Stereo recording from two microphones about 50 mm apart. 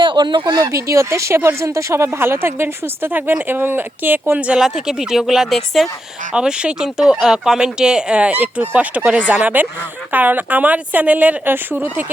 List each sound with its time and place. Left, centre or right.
0.6 s speech: right
2.1 s a woman's voice: right
3.1 s a woman's voice: right
4.4 s speech: right
4.6 s speech: centre
6.3 s speech: centre
8.3 s a woman's voice: right
11.5 s a woman's voice: right